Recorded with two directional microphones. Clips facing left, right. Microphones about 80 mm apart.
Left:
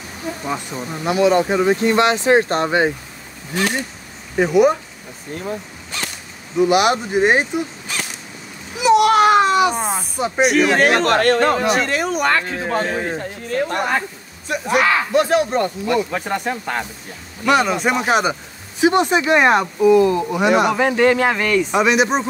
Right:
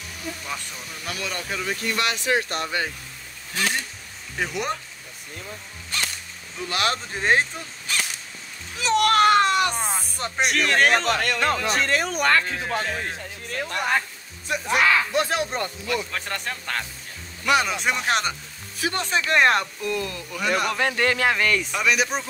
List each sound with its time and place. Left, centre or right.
0.5 s speech: left
1.0 s speech: left
5.9 s a sound: centre
6.5 s speech: centre
7.9 s a sound: centre
10.4 s speech: centre
11.1 s speech: left
12.3 s speech: left
13.2 s speech: left
14.5 s speech: centre
21.7 s speech: left